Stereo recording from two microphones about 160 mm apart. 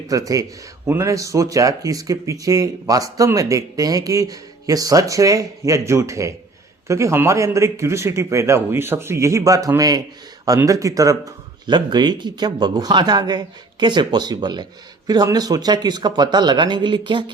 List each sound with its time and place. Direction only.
0.1 s speech: 20° right (ahead or behind)